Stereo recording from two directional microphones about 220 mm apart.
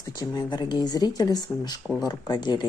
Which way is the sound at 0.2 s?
20° left (ahead or behind).